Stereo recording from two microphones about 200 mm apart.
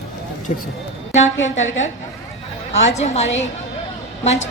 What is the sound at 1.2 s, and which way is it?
Speech, 70° left (ahead or behind).